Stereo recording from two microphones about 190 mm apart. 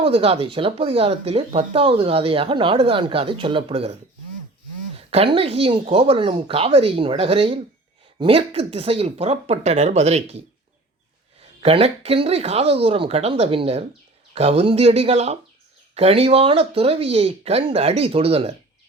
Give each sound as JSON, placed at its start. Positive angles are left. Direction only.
{"t": 0.0, "sound": "speech", "side_deg": -30}
{"t": 4.9, "sound": "speech", "side_deg": -30}
{"t": 11.6, "sound": "speech", "side_deg": -30}